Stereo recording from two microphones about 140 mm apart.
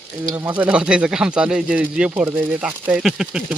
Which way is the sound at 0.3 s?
15° right (ahead or behind).